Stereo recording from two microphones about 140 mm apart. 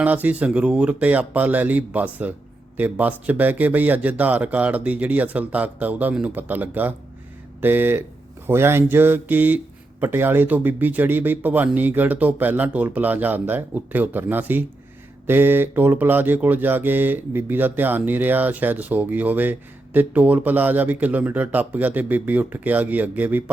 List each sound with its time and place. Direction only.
0.0 s speech: 10° right (ahead or behind)